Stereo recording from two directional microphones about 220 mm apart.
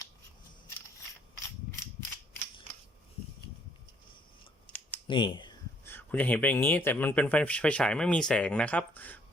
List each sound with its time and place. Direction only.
4.6 s scissors: 5° left (ahead or behind)
5.0 s computer keyboard: 20° left (ahead or behind)
5.8 s speech: 10° left (ahead or behind)